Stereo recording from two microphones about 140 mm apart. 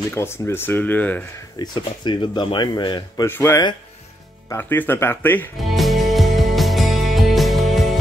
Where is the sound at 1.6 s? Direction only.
30° left (ahead or behind).